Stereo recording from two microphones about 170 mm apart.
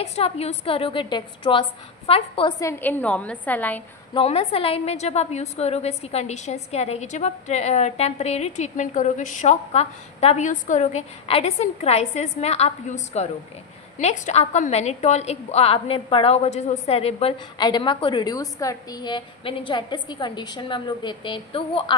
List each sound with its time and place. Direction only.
0.0 s a woman's voice: 35° left (ahead or behind)
2.6 s a woman's voice: 10° left (ahead or behind)
4.1 s a woman's voice: 30° left (ahead or behind)